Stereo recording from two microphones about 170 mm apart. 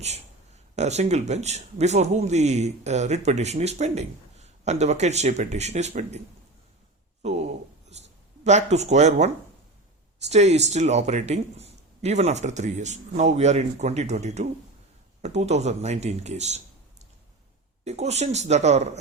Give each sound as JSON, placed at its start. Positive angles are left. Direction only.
{"t": 0.0, "sound": "speech", "side_deg": -40}
{"t": 7.2, "sound": "a sound", "side_deg": -40}
{"t": 8.4, "sound": "speech", "side_deg": -40}
{"t": 17.8, "sound": "speech", "side_deg": -40}